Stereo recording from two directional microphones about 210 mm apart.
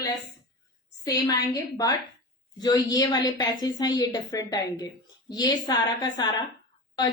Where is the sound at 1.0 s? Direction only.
15° left (ahead or behind).